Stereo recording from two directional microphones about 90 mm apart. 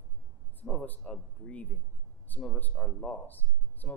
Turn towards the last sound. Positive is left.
turn(degrees=20)  # may be behind; listen again after turning